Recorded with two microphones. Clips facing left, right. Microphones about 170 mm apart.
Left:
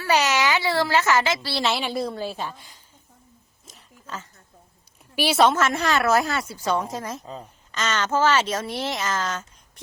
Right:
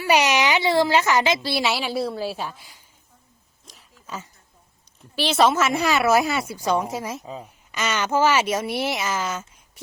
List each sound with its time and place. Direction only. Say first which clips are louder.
0.0 s a woman's voice: right 2 dB; 15° right (ahead or behind)
4.0 s speech: right 1 dB; 10° right (ahead or behind)
5.1 s speech: left 1 dB; 10° left (ahead or behind)
5.4 s a woman's voice: right 1 dB; 5° right (ahead or behind)